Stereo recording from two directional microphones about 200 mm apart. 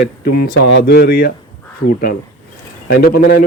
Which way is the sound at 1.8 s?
90° left.